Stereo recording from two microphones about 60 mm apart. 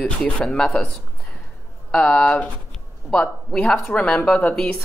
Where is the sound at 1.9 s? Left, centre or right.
Centre.